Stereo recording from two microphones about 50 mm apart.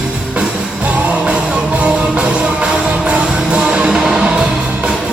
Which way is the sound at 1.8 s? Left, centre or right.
Right.